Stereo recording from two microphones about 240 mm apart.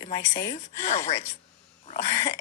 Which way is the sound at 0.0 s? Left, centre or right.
Centre.